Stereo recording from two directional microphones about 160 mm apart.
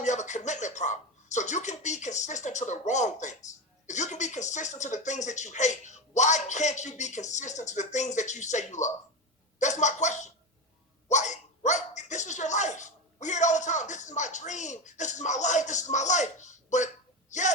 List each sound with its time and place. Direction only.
0.0 s speech: 45° left (ahead or behind)